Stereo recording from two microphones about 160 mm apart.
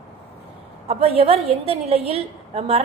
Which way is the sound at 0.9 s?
40° right (ahead or behind).